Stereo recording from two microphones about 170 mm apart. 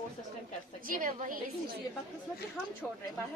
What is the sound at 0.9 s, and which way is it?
Speech, 55° right (ahead or behind).